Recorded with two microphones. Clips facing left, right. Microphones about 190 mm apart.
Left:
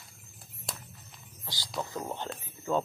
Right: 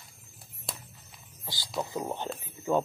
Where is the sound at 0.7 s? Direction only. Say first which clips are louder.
Even; centre (ahead or behind).